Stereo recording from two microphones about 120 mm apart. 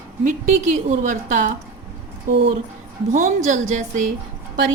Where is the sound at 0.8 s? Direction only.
90° right.